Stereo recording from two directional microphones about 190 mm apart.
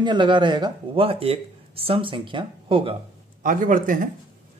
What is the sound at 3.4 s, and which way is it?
Speech, 45° right (ahead or behind).